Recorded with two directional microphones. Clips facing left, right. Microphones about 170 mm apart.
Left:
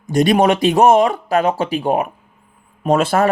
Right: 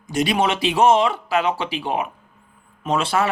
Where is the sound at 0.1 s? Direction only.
45° left (ahead or behind).